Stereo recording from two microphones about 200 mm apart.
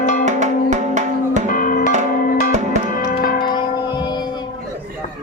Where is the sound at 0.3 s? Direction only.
35° right (ahead or behind).